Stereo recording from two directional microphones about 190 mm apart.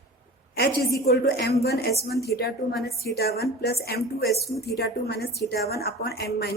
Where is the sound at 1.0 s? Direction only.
55° left (ahead or behind).